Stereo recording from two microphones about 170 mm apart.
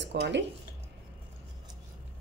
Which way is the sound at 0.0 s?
90° right.